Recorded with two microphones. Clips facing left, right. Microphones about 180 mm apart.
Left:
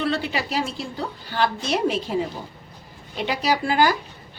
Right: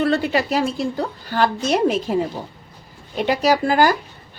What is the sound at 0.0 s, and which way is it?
A woman's voice, 45° right (ahead or behind).